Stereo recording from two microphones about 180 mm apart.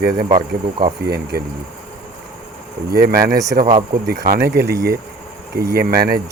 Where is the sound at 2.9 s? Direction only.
55° right (ahead or behind).